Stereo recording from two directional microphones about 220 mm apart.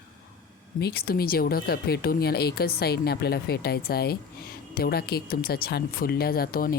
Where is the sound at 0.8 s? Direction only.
45° left (ahead or behind).